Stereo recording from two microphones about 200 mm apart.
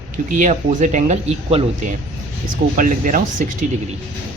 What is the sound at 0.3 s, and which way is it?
Speech, 40° right (ahead or behind).